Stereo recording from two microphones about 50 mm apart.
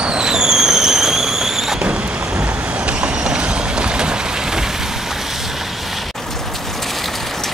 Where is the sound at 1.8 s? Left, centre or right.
Right.